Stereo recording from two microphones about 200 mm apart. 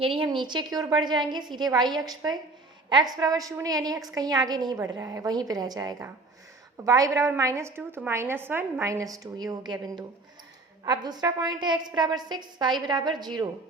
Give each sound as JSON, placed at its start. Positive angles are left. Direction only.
{"t": 0.0, "sound": "a woman's voice", "side_deg": -25}